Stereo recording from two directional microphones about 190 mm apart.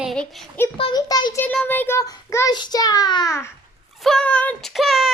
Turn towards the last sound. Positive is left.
turn(degrees=0)  # may be behind; listen again after turning